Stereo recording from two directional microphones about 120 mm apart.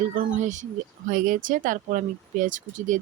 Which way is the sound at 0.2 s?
90° right.